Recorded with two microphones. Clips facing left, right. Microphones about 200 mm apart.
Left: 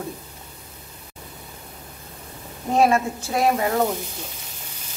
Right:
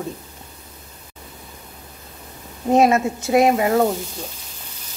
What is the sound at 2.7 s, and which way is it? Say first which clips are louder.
Speech: right 3 dB; 20° right (ahead or behind).